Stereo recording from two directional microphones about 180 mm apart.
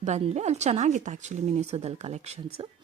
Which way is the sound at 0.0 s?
40° right (ahead or behind).